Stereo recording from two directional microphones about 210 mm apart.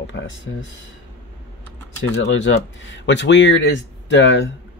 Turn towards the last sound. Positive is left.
turn(degrees=60)  # may be behind; listen again after turning